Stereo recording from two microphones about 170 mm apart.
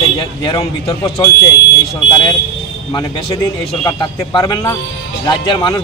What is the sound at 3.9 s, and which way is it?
Speech, 25° left (ahead or behind).